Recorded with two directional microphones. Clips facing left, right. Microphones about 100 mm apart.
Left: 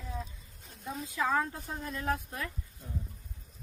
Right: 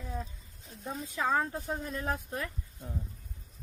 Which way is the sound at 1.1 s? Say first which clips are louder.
Even; 30° right (ahead or behind).